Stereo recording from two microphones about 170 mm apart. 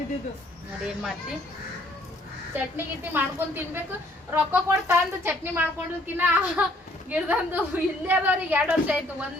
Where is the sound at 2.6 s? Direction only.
10° right (ahead or behind).